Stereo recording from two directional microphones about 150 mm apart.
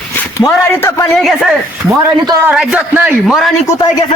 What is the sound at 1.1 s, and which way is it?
Speech, centre (ahead or behind).